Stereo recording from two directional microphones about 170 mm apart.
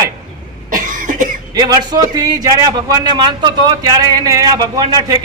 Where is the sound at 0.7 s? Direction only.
50° right (ahead or behind).